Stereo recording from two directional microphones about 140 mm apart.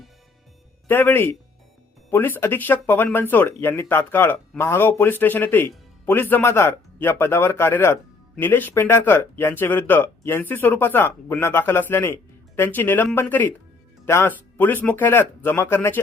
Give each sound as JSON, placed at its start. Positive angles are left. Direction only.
{"t": 0.9, "sound": "speech", "side_deg": 15}